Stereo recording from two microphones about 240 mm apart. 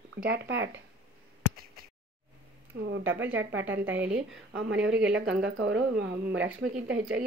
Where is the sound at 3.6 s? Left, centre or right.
Centre.